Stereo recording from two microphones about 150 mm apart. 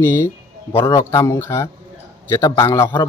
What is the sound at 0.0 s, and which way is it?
Speech, 15° left (ahead or behind).